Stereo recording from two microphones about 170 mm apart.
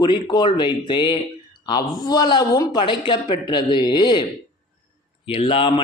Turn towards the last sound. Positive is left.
turn(degrees=30)  # may be behind; listen again after turning